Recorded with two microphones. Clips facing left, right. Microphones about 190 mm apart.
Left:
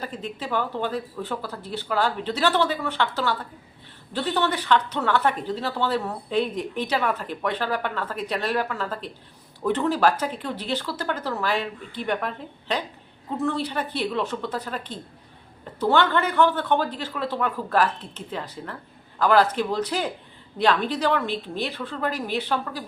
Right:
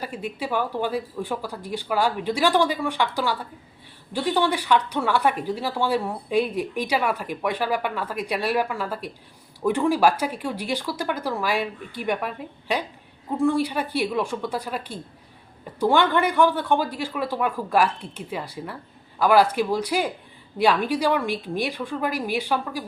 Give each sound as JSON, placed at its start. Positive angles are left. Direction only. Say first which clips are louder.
{"t": 0.0, "sound": "speech", "louder": "right 2 dB", "side_deg": -10}